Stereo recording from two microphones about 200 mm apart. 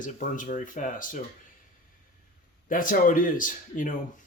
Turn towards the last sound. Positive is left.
turn(degrees=40)  # may be behind; listen again after turning